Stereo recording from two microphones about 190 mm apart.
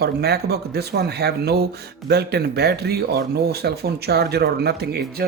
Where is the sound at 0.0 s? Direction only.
55° right (ahead or behind).